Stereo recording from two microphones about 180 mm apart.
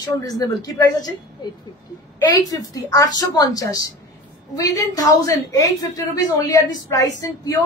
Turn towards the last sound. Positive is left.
turn(degrees=20)  # may be behind; listen again after turning